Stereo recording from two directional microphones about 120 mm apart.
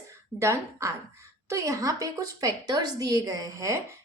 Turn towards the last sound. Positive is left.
turn(degrees=-25)  # may be behind; listen again after turning